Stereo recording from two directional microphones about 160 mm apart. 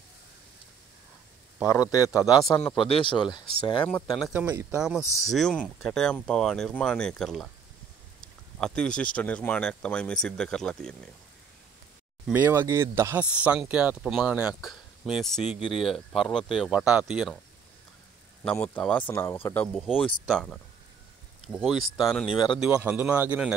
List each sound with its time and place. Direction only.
1.7 s a man's voice: 20° left (ahead or behind)
2.7 s a man's voice: 35° left (ahead or behind)
4.3 s a man's voice: 10° right (ahead or behind)
5.0 s a man's voice: 20° left (ahead or behind)
5.3 s speech: 5° left (ahead or behind)
8.5 s speech: 5° left (ahead or behind)
12.3 s speech: 10° right (ahead or behind)
18.4 s speech: 5° left (ahead or behind)
22.2 s speech: 35° left (ahead or behind)
22.6 s a man's voice: 5° right (ahead or behind)